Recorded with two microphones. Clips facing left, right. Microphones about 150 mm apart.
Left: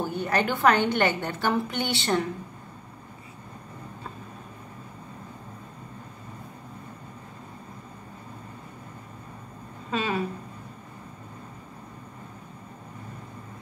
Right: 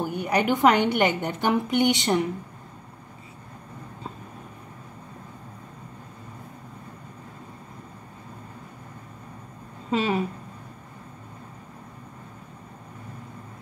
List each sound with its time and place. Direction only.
0.0 s a woman's voice: 15° right (ahead or behind)
9.8 s a woman's voice: 25° right (ahead or behind)